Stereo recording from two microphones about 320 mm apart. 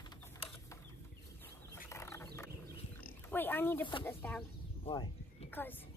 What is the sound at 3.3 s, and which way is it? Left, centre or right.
Speech, centre.